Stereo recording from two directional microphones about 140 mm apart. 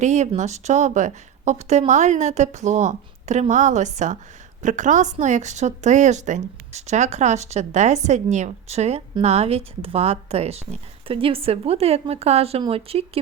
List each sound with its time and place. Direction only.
0.0 s a woman's voice: 55° right (ahead or behind)